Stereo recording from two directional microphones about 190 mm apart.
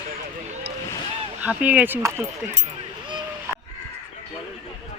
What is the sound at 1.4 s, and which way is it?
Speech, 5° right (ahead or behind).